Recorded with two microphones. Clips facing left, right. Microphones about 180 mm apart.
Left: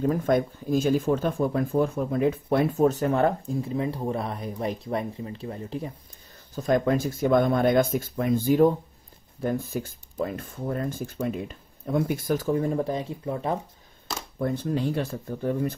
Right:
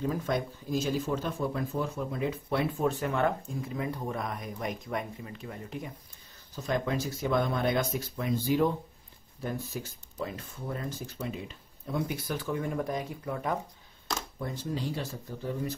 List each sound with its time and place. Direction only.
0.0 s speech: 50° left (ahead or behind); by 5.9 s 30° left (ahead or behind)
6.5 s speech: 50° left (ahead or behind); by 13.6 s 25° left (ahead or behind)
14.4 s speech: 55° left (ahead or behind)